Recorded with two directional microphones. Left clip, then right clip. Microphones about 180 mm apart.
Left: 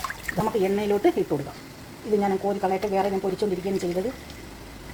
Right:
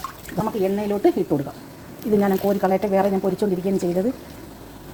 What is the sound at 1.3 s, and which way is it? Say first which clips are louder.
Speech: right 4 dB; 15° right (ahead or behind).